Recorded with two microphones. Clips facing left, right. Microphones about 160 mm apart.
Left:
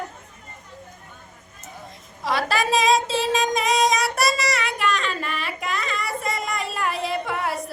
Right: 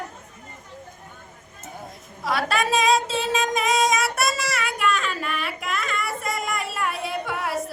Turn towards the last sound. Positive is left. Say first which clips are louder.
# left 1 dB
turn(degrees=0)  # may be behind; listen again after turning